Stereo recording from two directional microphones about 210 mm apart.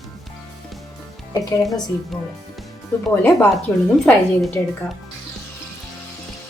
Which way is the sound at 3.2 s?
10° left (ahead or behind).